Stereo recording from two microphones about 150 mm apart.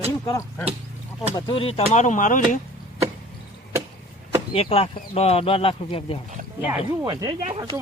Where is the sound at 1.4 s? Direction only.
35° left (ahead or behind); by 2.6 s 60° left (ahead or behind).